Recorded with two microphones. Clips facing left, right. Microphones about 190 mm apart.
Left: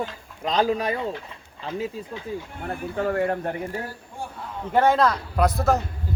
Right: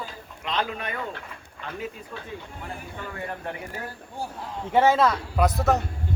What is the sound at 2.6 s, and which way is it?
Speech, 60° left (ahead or behind).